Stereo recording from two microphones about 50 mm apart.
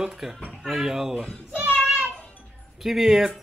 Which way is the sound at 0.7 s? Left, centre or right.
Centre.